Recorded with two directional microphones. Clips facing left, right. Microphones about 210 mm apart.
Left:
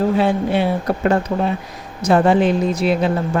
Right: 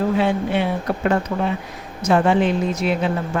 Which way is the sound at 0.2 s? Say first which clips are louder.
Left 3 dB; 35° left (ahead or behind).